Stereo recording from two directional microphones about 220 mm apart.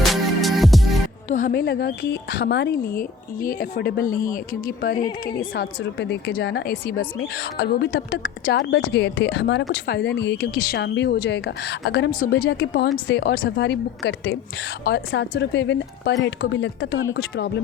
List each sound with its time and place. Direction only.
0.1 s music: centre (ahead or behind)
1.3 s speech: 35° left (ahead or behind)
5.5 s a woman's voice: 50° left (ahead or behind)